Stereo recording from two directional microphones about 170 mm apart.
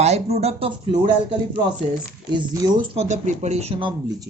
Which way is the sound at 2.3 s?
25° right (ahead or behind).